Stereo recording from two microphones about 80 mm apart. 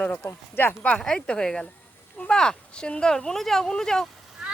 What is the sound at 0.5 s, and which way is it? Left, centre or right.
Speech, left.